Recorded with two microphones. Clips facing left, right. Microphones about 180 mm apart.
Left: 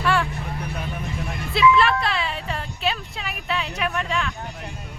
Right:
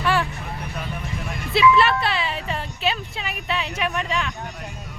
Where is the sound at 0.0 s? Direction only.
Centre (ahead or behind).